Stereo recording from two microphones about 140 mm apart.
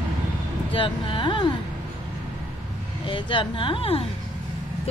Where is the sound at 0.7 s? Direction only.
35° left (ahead or behind).